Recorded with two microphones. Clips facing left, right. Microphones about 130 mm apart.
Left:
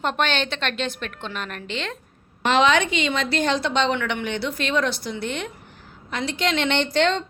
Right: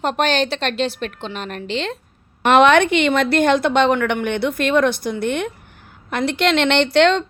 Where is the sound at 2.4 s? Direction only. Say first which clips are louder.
Right 6 dB; 55° right (ahead or behind).